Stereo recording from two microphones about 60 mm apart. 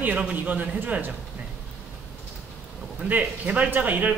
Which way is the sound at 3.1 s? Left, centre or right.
Right.